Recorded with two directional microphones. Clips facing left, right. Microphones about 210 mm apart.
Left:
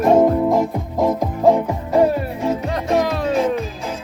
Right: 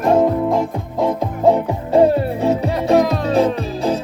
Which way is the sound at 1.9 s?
30° right (ahead or behind).